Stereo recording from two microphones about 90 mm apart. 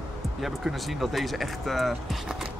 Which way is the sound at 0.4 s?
Centre (ahead or behind).